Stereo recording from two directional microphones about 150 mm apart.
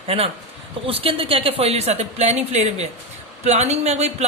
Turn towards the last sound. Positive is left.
turn(degrees=-45)  # may be behind; listen again after turning